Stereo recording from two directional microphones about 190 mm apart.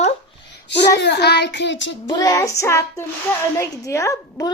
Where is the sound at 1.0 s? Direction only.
60° left (ahead or behind).